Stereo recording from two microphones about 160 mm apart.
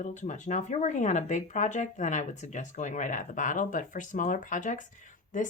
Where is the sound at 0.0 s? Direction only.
50° left (ahead or behind).